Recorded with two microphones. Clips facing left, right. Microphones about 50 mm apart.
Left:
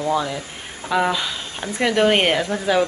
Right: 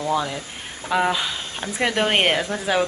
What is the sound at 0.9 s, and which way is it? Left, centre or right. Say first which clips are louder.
Speech: left 1 dB; centre.